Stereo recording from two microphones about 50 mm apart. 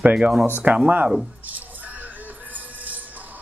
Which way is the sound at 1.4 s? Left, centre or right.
Right.